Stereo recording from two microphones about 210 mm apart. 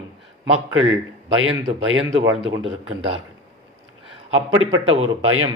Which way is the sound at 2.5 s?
25° right (ahead or behind).